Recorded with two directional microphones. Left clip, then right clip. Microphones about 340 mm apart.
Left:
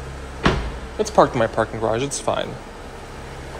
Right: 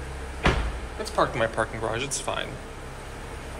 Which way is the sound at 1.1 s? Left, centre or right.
Centre.